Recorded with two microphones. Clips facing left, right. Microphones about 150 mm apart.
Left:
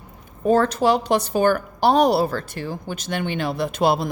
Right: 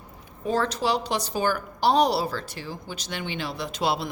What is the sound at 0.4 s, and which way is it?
A woman's voice, 50° left (ahead or behind).